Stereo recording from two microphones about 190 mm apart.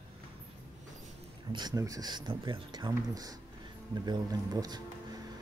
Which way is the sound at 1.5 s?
20° right (ahead or behind).